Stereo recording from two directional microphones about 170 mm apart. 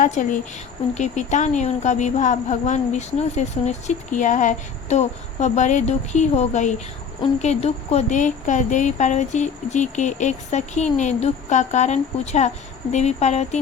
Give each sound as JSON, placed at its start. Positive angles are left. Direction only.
{"t": 0.0, "sound": "a woman's voice", "side_deg": 45}